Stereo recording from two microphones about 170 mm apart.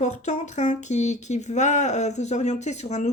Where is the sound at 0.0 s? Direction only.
45° left (ahead or behind).